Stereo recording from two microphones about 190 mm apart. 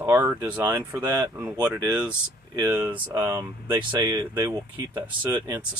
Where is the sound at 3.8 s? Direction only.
25° right (ahead or behind).